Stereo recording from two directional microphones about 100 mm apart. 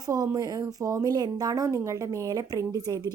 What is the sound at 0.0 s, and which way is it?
A woman's voice, 35° right (ahead or behind).